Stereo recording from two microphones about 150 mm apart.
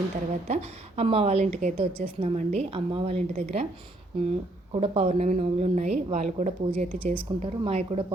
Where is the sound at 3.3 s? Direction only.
50° right (ahead or behind).